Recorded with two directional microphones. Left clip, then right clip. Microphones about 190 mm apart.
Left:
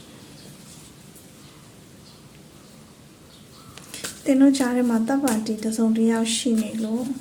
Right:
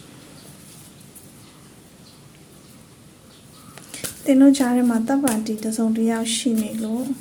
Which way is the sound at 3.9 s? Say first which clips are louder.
Right 3 dB; 10° right (ahead or behind).